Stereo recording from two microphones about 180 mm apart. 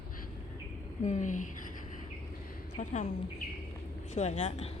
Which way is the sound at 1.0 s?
45° left (ahead or behind).